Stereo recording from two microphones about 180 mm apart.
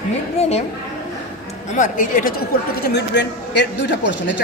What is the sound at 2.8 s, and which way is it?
A man's voice, 70° left (ahead or behind).